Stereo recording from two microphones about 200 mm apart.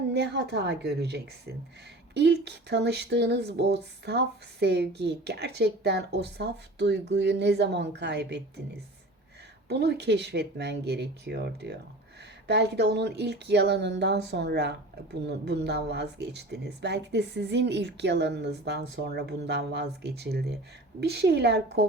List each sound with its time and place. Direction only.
0.1 s a woman's voice: 60° right (ahead or behind)